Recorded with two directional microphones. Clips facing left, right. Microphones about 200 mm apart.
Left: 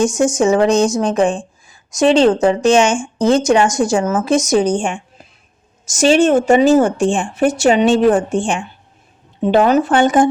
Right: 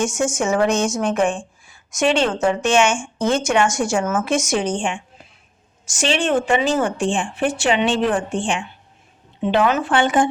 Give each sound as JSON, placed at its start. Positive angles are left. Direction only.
{"t": 0.3, "sound": "a woman's voice", "side_deg": 35}